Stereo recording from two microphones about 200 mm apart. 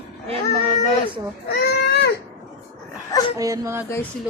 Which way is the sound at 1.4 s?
55° left (ahead or behind).